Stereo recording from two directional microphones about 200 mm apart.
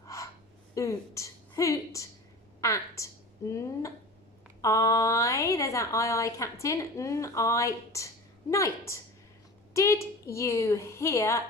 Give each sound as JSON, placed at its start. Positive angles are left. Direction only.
{"t": 0.0, "sound": "gasp", "side_deg": 15}
{"t": 0.8, "sound": "a woman's voice", "side_deg": 15}
{"t": 9.7, "sound": "a woman's voice", "side_deg": 15}